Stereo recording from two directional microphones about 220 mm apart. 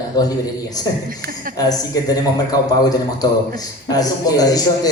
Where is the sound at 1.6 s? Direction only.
15° left (ahead or behind).